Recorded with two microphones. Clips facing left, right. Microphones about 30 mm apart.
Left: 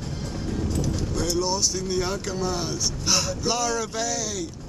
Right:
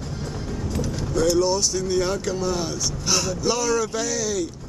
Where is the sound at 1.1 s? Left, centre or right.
Centre.